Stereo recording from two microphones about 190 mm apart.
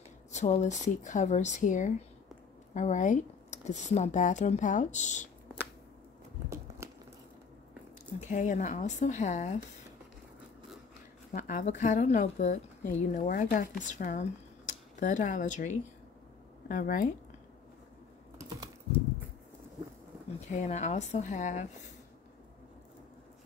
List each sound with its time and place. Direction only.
0.3 s speech: 35° left (ahead or behind)
6.8 s a sound: 15° right (ahead or behind)
8.2 s speech: 40° left (ahead or behind)
11.3 s a woman's voice: 40° left (ahead or behind)
20.3 s speech: 40° left (ahead or behind)